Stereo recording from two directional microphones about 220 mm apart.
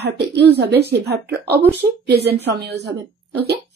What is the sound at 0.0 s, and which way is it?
Speech, 50° right (ahead or behind).